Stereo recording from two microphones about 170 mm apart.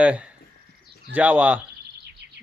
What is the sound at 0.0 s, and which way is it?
Speech, 5° right (ahead or behind).